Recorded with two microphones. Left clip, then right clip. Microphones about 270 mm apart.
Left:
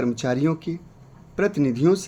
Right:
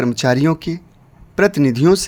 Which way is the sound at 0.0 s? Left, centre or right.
Right.